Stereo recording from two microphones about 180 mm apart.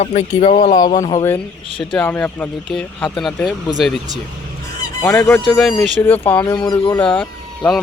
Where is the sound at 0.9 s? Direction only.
20° left (ahead or behind).